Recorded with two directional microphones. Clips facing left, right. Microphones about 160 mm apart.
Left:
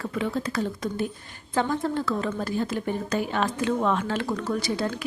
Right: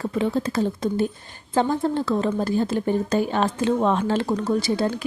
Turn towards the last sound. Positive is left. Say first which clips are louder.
# right 5 dB
turn(degrees=-30)  # may be behind; listen again after turning